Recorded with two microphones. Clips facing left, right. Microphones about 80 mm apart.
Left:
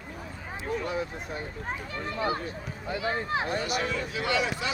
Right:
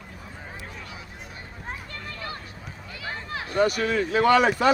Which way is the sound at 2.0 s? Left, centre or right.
Left.